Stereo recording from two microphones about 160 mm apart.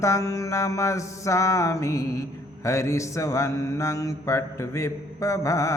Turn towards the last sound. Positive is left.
turn(degrees=20)  # may be behind; listen again after turning